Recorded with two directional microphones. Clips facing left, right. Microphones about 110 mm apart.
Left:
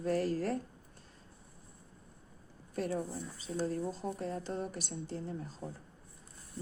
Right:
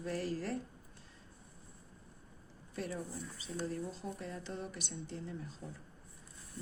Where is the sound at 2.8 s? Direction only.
40° left (ahead or behind).